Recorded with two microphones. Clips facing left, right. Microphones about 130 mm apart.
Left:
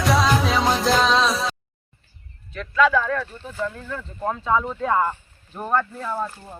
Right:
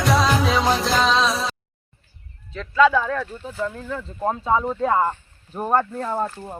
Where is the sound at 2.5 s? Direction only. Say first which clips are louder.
Right 2 dB; 25° right (ahead or behind).